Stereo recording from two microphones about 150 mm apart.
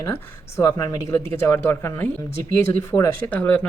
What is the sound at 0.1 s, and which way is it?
Speech, 20° left (ahead or behind).